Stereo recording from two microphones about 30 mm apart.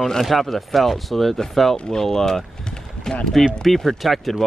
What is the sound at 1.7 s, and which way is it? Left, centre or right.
Speech, centre.